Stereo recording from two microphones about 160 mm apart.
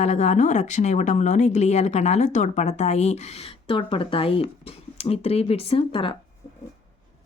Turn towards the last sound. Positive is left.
turn(degrees=35)  # may be behind; listen again after turning